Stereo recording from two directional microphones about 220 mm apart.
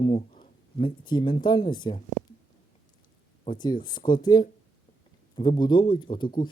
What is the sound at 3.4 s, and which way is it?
Speech, 20° left (ahead or behind).